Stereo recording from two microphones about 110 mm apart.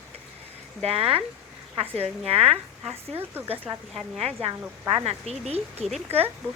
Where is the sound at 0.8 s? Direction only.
65° right (ahead or behind).